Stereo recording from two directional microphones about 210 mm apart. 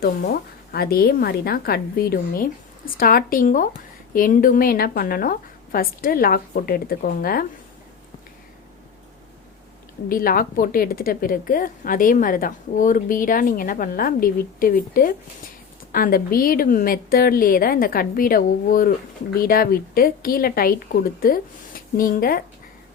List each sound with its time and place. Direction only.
0.0 s a woman's voice: 45° left (ahead or behind)
10.1 s a woman's voice: 45° left (ahead or behind)